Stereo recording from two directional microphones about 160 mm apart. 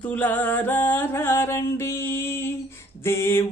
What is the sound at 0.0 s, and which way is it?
Music, 10° left (ahead or behind).